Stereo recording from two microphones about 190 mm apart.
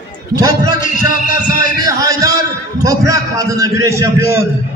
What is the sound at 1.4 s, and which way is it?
Speech, 45° left (ahead or behind).